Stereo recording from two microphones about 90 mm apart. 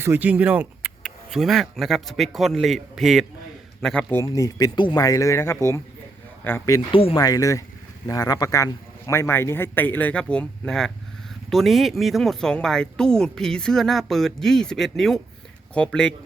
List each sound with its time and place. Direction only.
0.0 s speech: 20° right (ahead or behind); by 3.2 s centre (ahead or behind)
3.8 s a man's voice: 10° left (ahead or behind)
4.3 s a man's voice: 40° left (ahead or behind); by 6.6 s 20° left (ahead or behind)
6.9 s speech: 90° left
7.2 s a man's voice: 40° left (ahead or behind); by 16.1 s 10° left (ahead or behind)